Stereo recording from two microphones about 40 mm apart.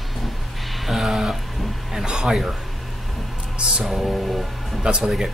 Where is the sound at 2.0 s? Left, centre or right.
Centre.